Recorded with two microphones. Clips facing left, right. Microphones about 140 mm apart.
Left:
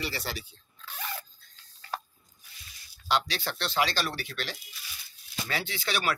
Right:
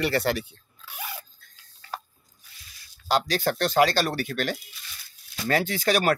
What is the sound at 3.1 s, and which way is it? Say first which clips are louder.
Speech: right 6 dB; 45° right (ahead or behind).